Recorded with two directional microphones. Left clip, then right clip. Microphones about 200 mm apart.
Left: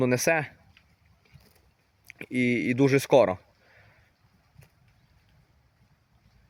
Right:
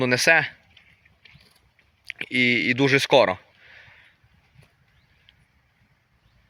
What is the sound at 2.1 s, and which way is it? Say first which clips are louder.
Speech: right 7 dB; 10° left (ahead or behind).